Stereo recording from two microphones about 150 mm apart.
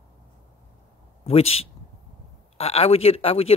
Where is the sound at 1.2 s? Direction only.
40° left (ahead or behind).